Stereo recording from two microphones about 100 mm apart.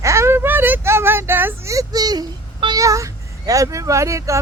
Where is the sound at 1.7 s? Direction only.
40° right (ahead or behind).